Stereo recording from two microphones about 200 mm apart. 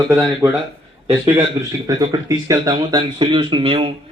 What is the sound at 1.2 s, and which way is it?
A man's voice, 15° right (ahead or behind).